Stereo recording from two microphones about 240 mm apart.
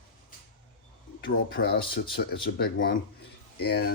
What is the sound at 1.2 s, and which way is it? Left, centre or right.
Speech, left.